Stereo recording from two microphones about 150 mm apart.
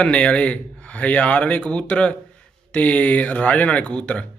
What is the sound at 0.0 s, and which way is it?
A man's voice, 10° left (ahead or behind).